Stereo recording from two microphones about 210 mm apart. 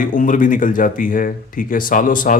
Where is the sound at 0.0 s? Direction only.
40° left (ahead or behind).